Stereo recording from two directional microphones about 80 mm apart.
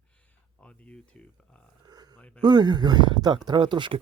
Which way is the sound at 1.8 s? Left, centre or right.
Right.